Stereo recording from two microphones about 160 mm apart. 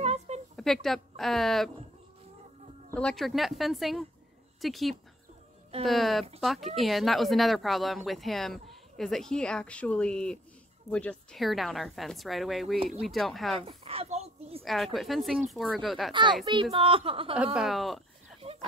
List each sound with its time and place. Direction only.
0.0 s a sound: 40° right (ahead or behind)
0.6 s speech: centre (ahead or behind)
2.9 s speech: 5° left (ahead or behind)
13.6 s a woman's voice: 40° right (ahead or behind)
14.6 s speech: centre (ahead or behind)
16.1 s a child's voice: 30° right (ahead or behind)
17.6 s speech: centre (ahead or behind)
18.4 s a sound: 40° right (ahead or behind)